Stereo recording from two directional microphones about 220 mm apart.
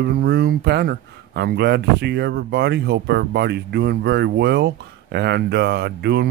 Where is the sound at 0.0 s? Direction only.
45° right (ahead or behind).